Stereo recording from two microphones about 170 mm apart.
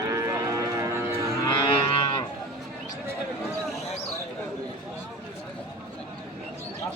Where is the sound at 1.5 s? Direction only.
25° left (ahead or behind).